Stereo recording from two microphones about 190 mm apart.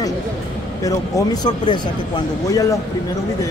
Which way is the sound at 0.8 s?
20° left (ahead or behind).